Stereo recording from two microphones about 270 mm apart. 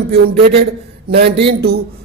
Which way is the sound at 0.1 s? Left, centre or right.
Right.